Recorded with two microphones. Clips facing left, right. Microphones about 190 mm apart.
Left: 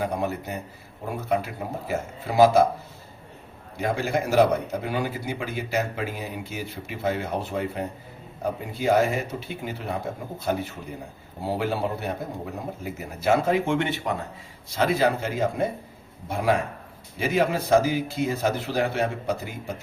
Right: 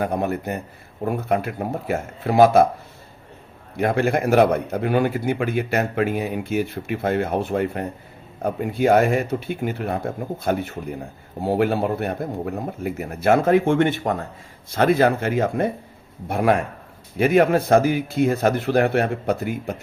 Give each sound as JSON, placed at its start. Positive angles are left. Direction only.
{"t": 0.0, "sound": "a man's voice", "side_deg": -55}
{"t": 3.8, "sound": "a man's voice", "side_deg": -60}